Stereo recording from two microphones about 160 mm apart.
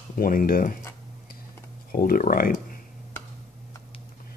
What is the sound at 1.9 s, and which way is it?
Speech, 60° left (ahead or behind).